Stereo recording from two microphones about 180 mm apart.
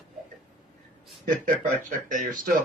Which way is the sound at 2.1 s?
45° right (ahead or behind).